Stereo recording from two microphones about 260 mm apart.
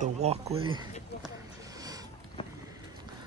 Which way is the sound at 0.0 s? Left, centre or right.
Right.